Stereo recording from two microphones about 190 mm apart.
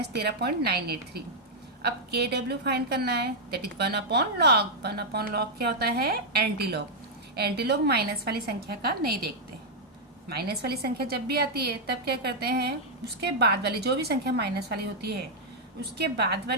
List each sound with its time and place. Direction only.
0.0 s a woman's voice: 60° right (ahead or behind)